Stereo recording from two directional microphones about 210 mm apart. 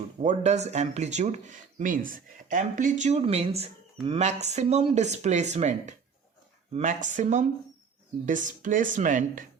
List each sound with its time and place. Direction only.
0.2 s speech: 35° right (ahead or behind)